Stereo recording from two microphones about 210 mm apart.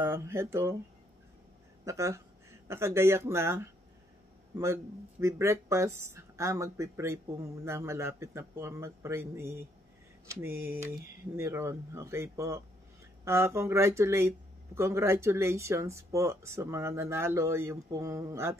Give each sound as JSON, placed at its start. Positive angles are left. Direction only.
{"t": 0.0, "sound": "speech", "side_deg": -10}
{"t": 1.9, "sound": "speech", "side_deg": -15}
{"t": 5.2, "sound": "speech", "side_deg": -15}